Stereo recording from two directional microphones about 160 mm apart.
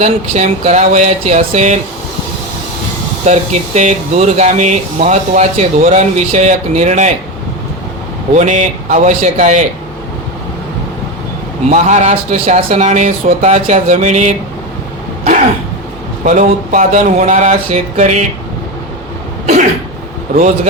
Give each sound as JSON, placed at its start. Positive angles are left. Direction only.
{"t": 0.0, "sound": "speech", "side_deg": -45}
{"t": 3.2, "sound": "speech", "side_deg": -45}
{"t": 8.4, "sound": "speech", "side_deg": -50}
{"t": 11.7, "sound": "speech", "side_deg": -45}
{"t": 15.2, "sound": "throat clearing", "side_deg": -50}
{"t": 16.2, "sound": "speech", "side_deg": -55}